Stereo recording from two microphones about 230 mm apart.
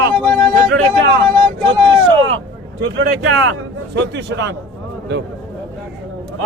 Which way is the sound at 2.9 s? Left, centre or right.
Right.